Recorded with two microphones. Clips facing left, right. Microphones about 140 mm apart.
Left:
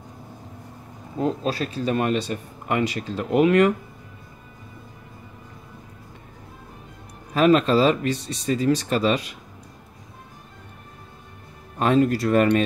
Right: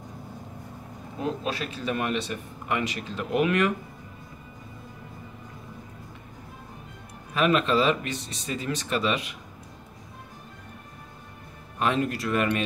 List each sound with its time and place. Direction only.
1.4 s speech: 35° left (ahead or behind)
7.3 s speech: 35° left (ahead or behind)
11.8 s speech: 40° left (ahead or behind)